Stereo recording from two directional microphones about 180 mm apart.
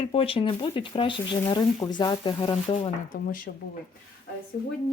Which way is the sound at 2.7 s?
40° left (ahead or behind).